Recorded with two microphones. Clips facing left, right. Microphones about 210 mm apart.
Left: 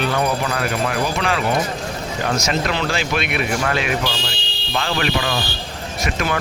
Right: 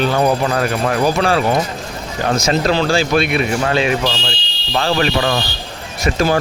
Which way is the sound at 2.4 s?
35° right (ahead or behind).